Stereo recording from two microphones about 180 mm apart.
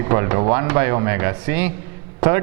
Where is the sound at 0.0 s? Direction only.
15° right (ahead or behind).